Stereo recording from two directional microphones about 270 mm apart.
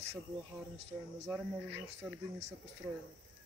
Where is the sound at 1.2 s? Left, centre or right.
Centre.